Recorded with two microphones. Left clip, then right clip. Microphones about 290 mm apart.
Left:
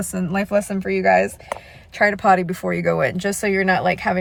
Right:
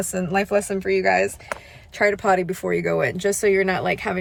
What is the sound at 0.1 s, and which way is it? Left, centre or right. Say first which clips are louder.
A woman's voice: left 1 dB; centre.